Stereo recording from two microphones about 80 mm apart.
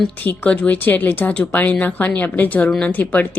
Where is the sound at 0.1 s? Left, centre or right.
Left.